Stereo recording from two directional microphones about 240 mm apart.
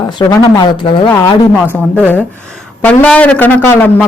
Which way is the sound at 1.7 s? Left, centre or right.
Centre.